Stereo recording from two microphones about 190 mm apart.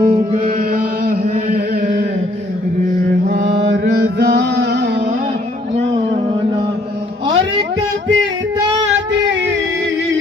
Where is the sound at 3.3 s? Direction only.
55° right (ahead or behind).